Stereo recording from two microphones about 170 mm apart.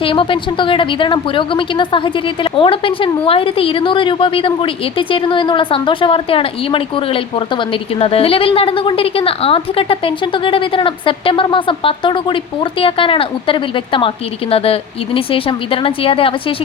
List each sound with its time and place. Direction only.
0.0 s a woman's voice: 30° left (ahead or behind)